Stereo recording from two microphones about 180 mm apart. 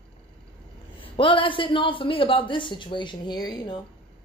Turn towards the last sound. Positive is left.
turn(degrees=25)  # may be behind; listen again after turning